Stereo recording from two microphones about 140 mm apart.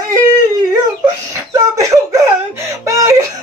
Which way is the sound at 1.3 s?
25° right (ahead or behind).